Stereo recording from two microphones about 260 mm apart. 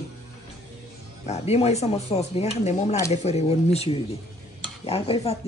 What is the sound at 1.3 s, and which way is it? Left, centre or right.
Speech, left.